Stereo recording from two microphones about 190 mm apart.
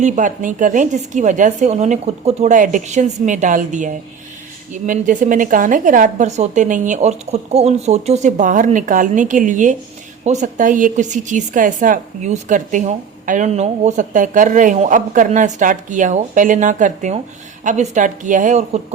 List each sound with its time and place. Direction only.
0.0 s a woman's voice: 40° right (ahead or behind)